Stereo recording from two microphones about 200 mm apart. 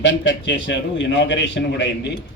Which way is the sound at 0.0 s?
65° left (ahead or behind).